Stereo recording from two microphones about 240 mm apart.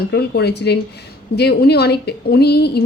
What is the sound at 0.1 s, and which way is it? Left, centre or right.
A woman's voice, left.